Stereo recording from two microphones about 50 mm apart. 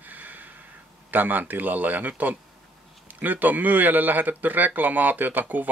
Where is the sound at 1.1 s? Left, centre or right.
Right.